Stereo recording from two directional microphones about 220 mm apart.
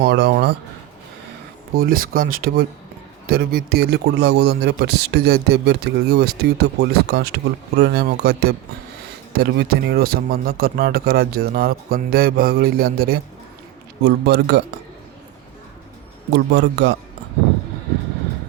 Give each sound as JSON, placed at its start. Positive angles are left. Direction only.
{"t": 0.0, "sound": "speech", "side_deg": -50}
{"t": 1.7, "sound": "speech", "side_deg": -40}
{"t": 16.3, "sound": "speech", "side_deg": -50}